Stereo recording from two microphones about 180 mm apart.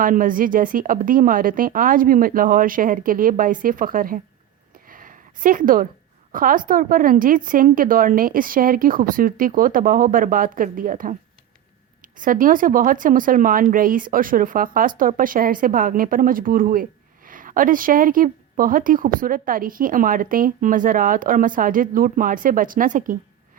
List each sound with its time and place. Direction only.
0.0 s speech: 50° right (ahead or behind)
4.9 s a sound: 50° right (ahead or behind)
6.3 s speech: 50° right (ahead or behind)